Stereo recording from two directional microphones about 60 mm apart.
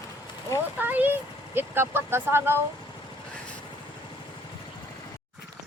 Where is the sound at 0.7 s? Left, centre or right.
Right.